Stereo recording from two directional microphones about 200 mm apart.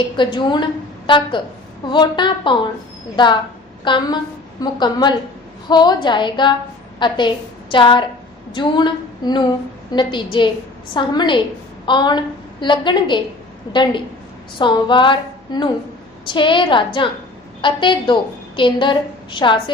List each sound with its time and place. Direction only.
0.2 s a woman's voice: 25° left (ahead or behind)
3.8 s a woman's voice: 25° left (ahead or behind)
14.6 s a woman's voice: 25° left (ahead or behind)